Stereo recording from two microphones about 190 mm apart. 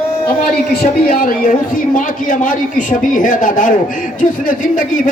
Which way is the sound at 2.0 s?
45° left (ahead or behind).